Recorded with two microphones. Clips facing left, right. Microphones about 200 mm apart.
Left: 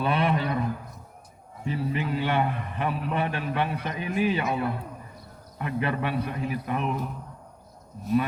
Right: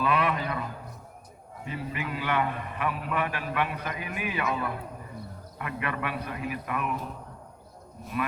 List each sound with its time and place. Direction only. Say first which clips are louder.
0.0 s a man's voice: left 2 dB; 30° left (ahead or behind)
1.6 s a man's voice: left 6 dB; 30° left (ahead or behind)